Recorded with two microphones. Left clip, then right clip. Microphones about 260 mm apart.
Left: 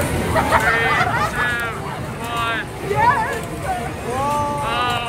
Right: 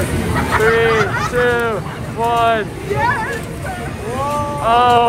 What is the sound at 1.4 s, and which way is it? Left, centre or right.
Speech, centre.